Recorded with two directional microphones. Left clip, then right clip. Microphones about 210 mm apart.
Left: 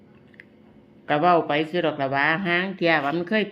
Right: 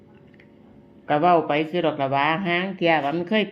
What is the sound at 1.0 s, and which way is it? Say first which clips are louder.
Speech: right 1 dB; 5° left (ahead or behind).